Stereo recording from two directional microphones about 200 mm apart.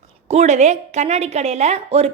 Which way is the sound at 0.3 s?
35° right (ahead or behind).